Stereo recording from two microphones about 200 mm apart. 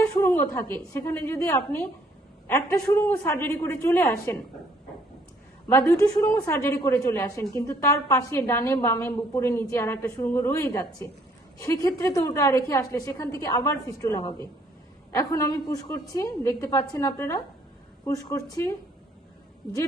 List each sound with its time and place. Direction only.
0.0 s a woman's voice: 15° left (ahead or behind)
5.6 s a woman's voice: 10° left (ahead or behind)